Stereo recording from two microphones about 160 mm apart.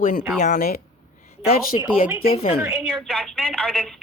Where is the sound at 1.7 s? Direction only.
35° left (ahead or behind).